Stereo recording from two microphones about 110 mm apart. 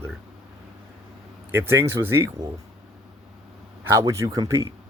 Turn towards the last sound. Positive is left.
turn(degrees=-25)  # may be behind; listen again after turning